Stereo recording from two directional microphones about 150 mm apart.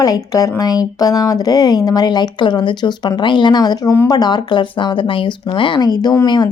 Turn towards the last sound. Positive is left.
turn(degrees=25)  # may be behind; listen again after turning